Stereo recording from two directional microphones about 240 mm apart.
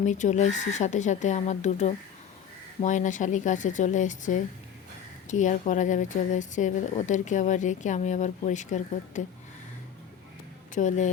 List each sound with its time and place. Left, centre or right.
0.0 s speech: left
10.8 s speech: left